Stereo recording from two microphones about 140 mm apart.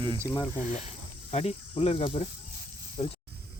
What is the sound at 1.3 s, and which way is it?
Speech, 45° left (ahead or behind).